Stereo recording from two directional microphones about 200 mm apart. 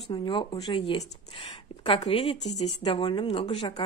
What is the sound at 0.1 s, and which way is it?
Speech, 25° left (ahead or behind).